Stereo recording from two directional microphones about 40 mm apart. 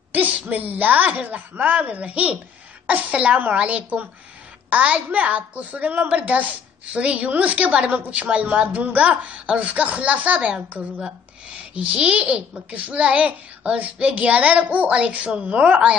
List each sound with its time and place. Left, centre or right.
0.1 s a woman's voice: right
10.4 s a woman's voice: right
11.7 s a child's voice: right